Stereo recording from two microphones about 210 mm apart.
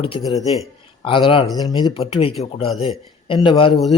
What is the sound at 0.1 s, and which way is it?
Speech, 25° left (ahead or behind).